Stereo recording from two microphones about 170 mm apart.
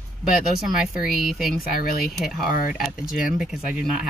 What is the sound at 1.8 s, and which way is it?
Speech, 60° left (ahead or behind).